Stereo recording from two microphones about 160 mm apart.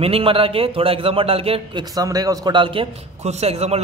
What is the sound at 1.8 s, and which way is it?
A man's voice, 25° right (ahead or behind).